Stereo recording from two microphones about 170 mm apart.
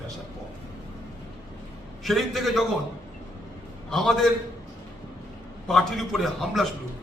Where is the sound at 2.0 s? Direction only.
Centre (ahead or behind).